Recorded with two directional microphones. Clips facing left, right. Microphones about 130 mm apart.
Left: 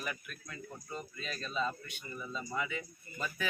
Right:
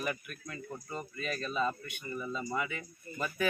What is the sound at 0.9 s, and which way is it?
Speech, 55° right (ahead or behind).